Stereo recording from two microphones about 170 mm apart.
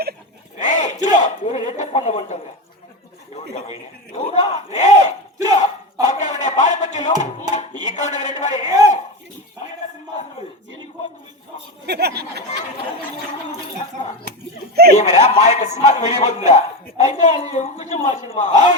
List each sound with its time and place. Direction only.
0.6 s a sound: 45° left (ahead or behind)
2.0 s a man's voice: 45° left (ahead or behind)
3.5 s speech: 40° left (ahead or behind)
5.5 s a sound: 45° left (ahead or behind)
7.5 s speech: 45° left (ahead or behind)
11.9 s speech: 70° right (ahead or behind)
14.9 s a man's voice: 40° left (ahead or behind)